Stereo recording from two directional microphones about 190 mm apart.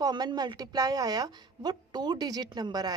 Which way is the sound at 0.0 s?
20° right (ahead or behind).